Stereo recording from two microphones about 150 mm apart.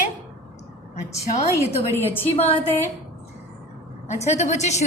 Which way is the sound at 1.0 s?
50° left (ahead or behind).